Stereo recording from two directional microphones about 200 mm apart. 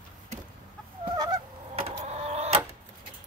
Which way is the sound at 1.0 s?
20° right (ahead or behind).